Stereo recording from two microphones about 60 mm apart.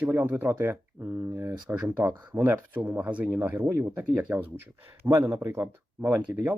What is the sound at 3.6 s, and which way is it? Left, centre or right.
Speech, right.